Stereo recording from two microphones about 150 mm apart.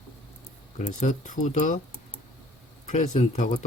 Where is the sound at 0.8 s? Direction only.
50° left (ahead or behind).